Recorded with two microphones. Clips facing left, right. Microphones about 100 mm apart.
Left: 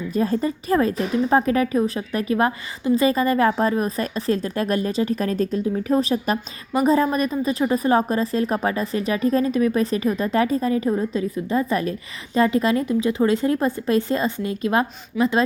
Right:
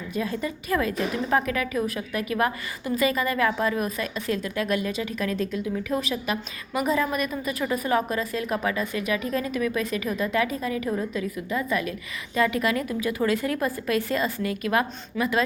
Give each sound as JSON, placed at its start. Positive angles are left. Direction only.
{"t": 0.1, "sound": "a woman's voice", "side_deg": 40}